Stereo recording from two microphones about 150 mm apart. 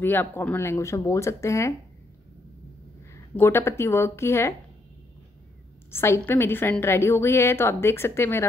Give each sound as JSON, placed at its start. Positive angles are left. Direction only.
{"t": 0.0, "sound": "speech", "side_deg": 15}
{"t": 3.3, "sound": "a woman's voice", "side_deg": 15}
{"t": 5.9, "sound": "a woman's voice", "side_deg": 15}